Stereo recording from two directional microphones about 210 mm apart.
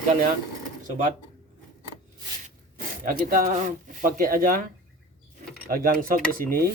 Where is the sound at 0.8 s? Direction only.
40° right (ahead or behind).